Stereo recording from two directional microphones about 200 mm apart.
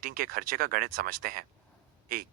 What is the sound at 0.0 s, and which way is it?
Speech, 45° right (ahead or behind).